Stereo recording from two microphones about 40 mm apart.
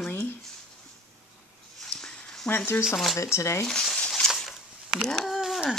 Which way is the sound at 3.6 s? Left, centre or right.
Centre.